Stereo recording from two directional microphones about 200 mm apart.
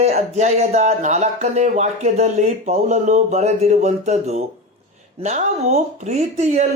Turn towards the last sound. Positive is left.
turn(degrees=-35)  # may be behind; listen again after turning